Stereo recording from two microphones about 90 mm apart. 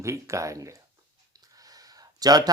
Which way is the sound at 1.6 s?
45° right (ahead or behind).